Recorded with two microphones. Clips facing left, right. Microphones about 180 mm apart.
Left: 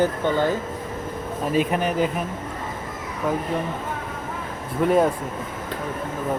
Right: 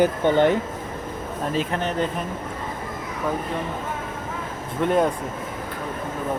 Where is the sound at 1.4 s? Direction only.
15° left (ahead or behind).